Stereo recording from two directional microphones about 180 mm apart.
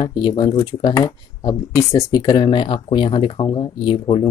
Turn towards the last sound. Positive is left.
turn(degrees=25)  # may be behind; listen again after turning